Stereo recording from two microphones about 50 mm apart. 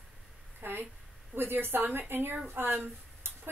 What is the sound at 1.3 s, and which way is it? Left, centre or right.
Speech, right.